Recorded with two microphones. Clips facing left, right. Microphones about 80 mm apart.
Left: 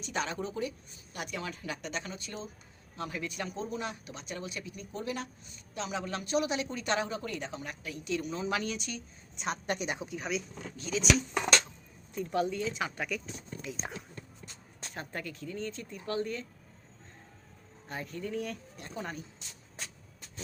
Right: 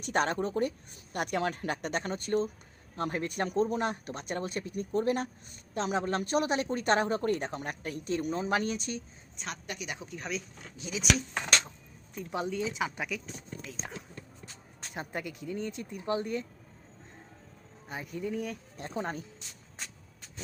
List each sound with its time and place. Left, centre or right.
0.0 s a woman's voice: right
9.6 s a woman's voice: left
10.1 s speech: centre
10.8 s speech: centre
12.3 s speech: right
12.5 s speech: centre
13.8 s speech: centre
14.9 s speech: centre
17.8 s speech: centre
18.8 s speech: right